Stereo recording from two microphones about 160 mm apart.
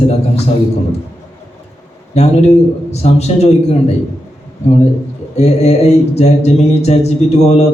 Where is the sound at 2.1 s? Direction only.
45° left (ahead or behind).